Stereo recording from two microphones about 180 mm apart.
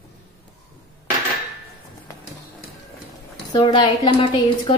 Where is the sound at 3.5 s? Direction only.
25° left (ahead or behind).